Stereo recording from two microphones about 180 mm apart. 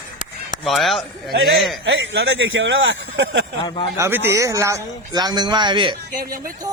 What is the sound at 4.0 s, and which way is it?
Speech, 15° right (ahead or behind).